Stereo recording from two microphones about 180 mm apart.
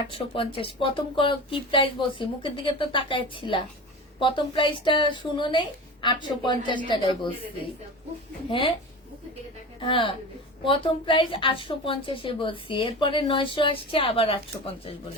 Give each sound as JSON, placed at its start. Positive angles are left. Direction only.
{"t": 0.1, "sound": "a woman's voice", "side_deg": 30}
{"t": 8.4, "sound": "a woman's voice", "side_deg": 30}
{"t": 9.8, "sound": "a woman's voice", "side_deg": 30}